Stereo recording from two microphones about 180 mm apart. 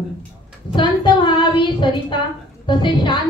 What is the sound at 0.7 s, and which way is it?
A woman's voice, 25° left (ahead or behind).